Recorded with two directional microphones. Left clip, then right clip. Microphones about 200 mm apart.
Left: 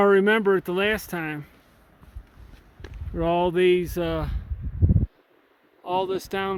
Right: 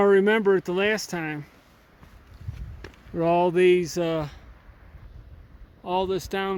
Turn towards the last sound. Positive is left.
turn(degrees=5)  # may be behind; listen again after turning